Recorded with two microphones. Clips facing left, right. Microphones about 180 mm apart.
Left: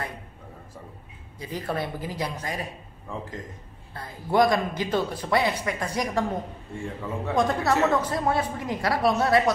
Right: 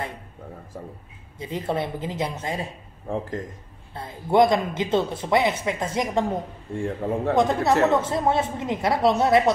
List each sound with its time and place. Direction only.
1.4 s speech: 25° right (ahead or behind)
3.1 s speech: 55° right (ahead or behind)
3.9 s speech: 25° right (ahead or behind)
7.0 s a man's voice: 55° right (ahead or behind)
7.3 s speech: 20° right (ahead or behind)